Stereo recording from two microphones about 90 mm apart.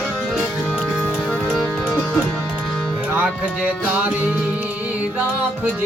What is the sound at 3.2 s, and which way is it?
Music, 20° right (ahead or behind).